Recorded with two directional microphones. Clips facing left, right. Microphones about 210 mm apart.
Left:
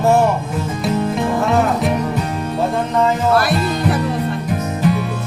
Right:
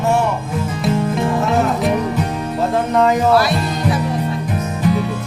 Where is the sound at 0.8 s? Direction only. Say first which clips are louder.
Right 1 dB; centre (ahead or behind).